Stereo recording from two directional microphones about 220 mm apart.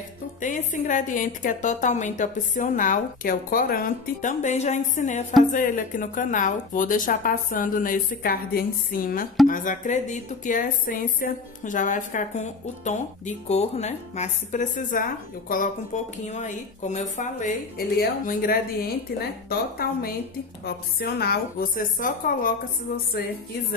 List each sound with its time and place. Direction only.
0.4 s a woman's voice: 35° left (ahead or behind)